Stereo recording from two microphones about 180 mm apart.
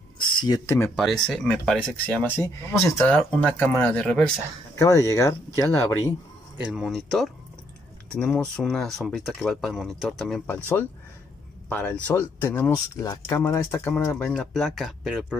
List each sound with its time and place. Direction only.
0.4 s speech: 20° left (ahead or behind)
1.2 s speech: 5° left (ahead or behind)
4.7 s speech: 20° left (ahead or behind)
6.6 s speech: 5° right (ahead or behind)